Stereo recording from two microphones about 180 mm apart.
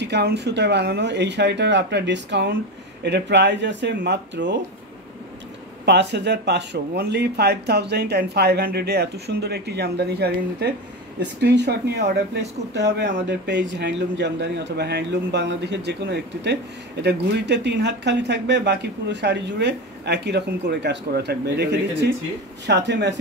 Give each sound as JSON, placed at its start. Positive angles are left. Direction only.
{"t": 0.0, "sound": "speech", "side_deg": -70}
{"t": 5.9, "sound": "speech", "side_deg": -70}